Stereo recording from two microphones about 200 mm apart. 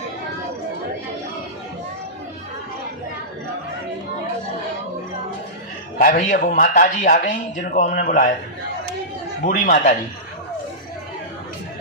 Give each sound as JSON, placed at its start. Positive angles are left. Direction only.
{"t": 6.0, "sound": "speech", "side_deg": 40}
{"t": 9.4, "sound": "speech", "side_deg": 40}